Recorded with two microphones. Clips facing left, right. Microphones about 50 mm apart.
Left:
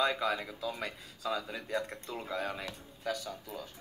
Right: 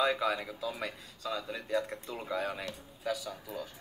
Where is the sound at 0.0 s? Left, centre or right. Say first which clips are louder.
Right 1 dB; centre.